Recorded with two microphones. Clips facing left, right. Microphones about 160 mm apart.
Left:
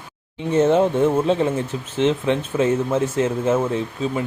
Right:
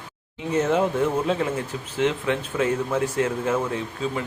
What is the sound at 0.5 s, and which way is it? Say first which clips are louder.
Speech: left 6 dB; 25° left (ahead or behind).